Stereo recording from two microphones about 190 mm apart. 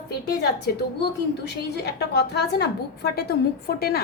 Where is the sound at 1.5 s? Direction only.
60° left (ahead or behind).